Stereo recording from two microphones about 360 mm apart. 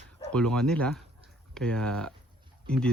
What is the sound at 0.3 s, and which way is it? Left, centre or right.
Speech, centre.